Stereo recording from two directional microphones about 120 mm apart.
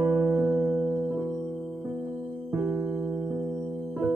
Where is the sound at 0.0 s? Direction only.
5° right (ahead or behind).